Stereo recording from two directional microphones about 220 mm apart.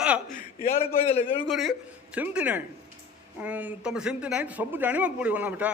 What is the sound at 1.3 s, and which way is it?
A man's voice, centre (ahead or behind).